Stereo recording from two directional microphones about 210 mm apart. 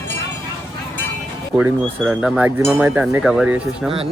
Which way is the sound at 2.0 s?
5° right (ahead or behind).